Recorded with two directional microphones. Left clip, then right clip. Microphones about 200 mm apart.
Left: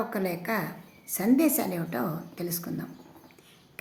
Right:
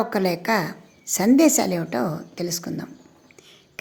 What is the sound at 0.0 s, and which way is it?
A woman's voice, 35° right (ahead or behind).